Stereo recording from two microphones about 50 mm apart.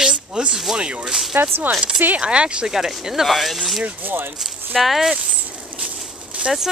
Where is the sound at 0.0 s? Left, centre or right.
Centre.